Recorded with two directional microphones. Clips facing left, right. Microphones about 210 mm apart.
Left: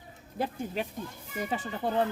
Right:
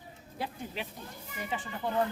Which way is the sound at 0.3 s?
45° left (ahead or behind).